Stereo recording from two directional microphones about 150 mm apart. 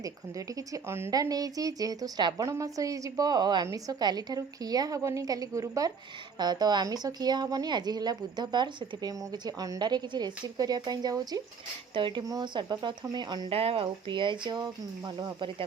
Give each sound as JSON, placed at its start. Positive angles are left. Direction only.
{"t": 0.0, "sound": "speech", "side_deg": -25}